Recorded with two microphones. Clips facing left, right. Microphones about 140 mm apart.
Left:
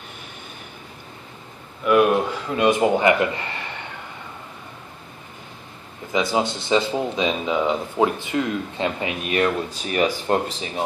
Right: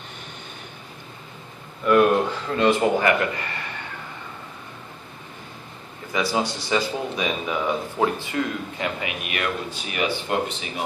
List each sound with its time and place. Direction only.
1.9 s speech: 5° left (ahead or behind); by 3.5 s 20° left (ahead or behind)
6.1 s speech: 20° left (ahead or behind); by 10.3 s 40° left (ahead or behind)